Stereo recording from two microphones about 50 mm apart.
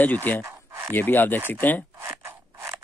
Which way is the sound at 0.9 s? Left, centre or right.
Left.